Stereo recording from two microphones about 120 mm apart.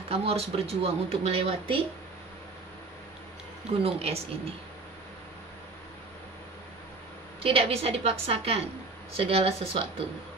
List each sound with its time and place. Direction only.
0.1 s speech: 55° right (ahead or behind)
3.8 s speech: 55° right (ahead or behind)
7.4 s speech: 55° right (ahead or behind)